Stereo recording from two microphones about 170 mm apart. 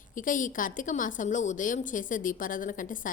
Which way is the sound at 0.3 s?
50° left (ahead or behind).